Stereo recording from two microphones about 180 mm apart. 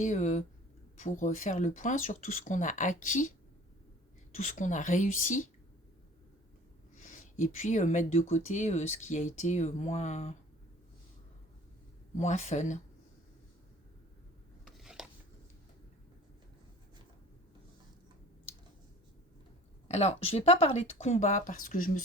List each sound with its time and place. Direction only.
0.0 s speech: 45° left (ahead or behind)
4.4 s speech: 45° left (ahead or behind)
6.9 s speech: 45° left (ahead or behind)
12.1 s speech: 40° left (ahead or behind)
14.8 s a sound: 5° right (ahead or behind)
19.9 s speech: 35° left (ahead or behind)